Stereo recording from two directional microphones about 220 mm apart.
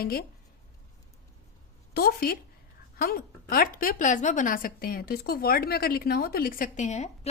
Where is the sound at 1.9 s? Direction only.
45° left (ahead or behind).